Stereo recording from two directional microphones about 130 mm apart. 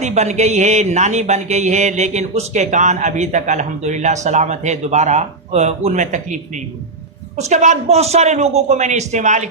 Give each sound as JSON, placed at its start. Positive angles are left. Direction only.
{"t": 0.0, "sound": "mantra", "side_deg": -60}